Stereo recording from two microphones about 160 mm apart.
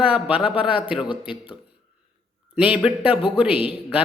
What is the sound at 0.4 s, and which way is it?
A man's voice, 35° left (ahead or behind).